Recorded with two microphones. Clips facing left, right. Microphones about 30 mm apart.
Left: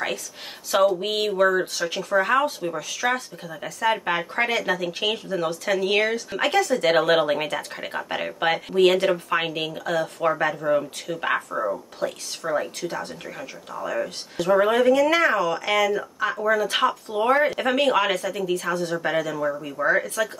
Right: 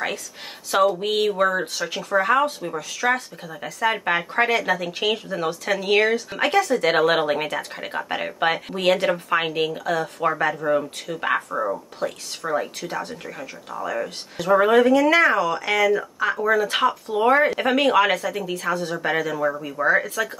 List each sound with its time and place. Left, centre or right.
0.7 s speech: centre
19.9 s speech: centre